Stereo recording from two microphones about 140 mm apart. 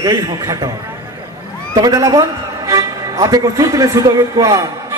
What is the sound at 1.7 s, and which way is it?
A man's voice, 25° right (ahead or behind).